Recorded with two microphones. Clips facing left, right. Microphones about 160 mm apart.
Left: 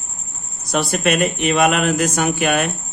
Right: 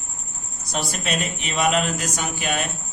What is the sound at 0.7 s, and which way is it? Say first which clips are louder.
A man's voice: left 8 dB; 65° left (ahead or behind).